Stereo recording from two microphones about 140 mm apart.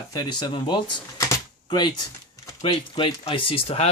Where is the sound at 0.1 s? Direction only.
30° left (ahead or behind).